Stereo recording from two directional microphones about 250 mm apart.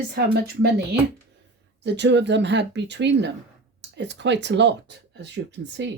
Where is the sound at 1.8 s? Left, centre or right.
Right.